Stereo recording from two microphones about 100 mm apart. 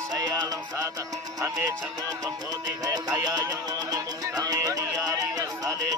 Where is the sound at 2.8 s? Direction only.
40° right (ahead or behind).